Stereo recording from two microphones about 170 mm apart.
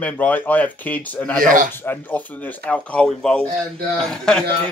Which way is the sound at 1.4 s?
50° right (ahead or behind).